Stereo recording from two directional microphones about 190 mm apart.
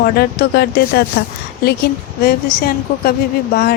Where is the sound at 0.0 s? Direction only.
55° left (ahead or behind).